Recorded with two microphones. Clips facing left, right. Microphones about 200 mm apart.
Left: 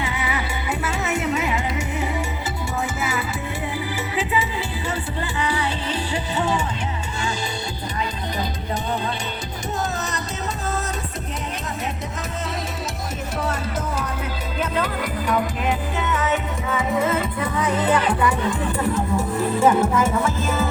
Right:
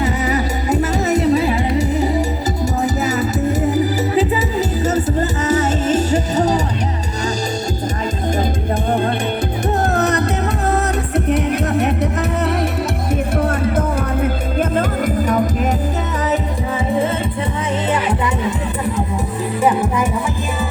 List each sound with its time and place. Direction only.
0.0 s music: 40° right (ahead or behind)
8.9 s music: 55° right (ahead or behind)
11.3 s music: 65° right (ahead or behind)
13.4 s music: 55° right (ahead or behind)
16.3 s music: 30° right (ahead or behind); by 20.1 s 15° right (ahead or behind)